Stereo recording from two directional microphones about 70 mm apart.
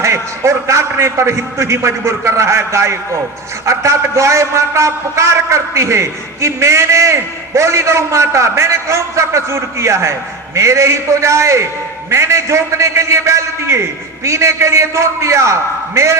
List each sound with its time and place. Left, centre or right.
0.0 s a man's voice: right